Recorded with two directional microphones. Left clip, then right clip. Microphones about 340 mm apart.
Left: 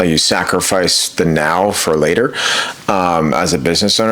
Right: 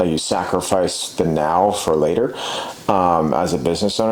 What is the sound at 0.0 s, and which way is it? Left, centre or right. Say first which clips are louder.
Speech: left 6 dB; left.